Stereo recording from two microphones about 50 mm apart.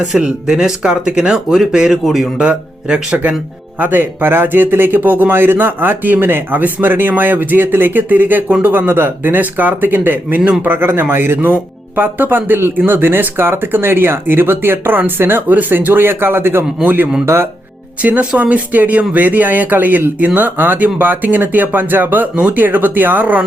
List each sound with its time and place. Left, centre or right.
0.2 s speech: centre
2.4 s speech: right
3.8 s speech: right
10.7 s speech: right
11.9 s speech: right
17.2 s speech: right
18.0 s speech: right